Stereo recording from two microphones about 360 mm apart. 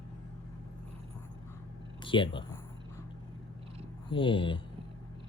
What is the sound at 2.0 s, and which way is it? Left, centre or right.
Speech, centre.